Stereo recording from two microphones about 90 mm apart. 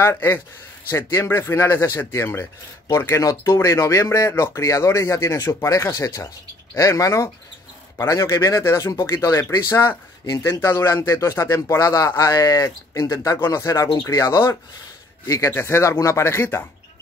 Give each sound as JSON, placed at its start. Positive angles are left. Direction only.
{"t": 0.0, "sound": "speech", "side_deg": 30}